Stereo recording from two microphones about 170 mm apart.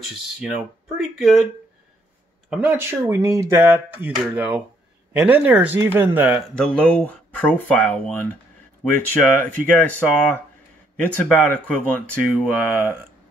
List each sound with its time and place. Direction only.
0.9 s speech: centre (ahead or behind)
2.5 s speech: 10° right (ahead or behind)
6.6 s speech: 5° left (ahead or behind)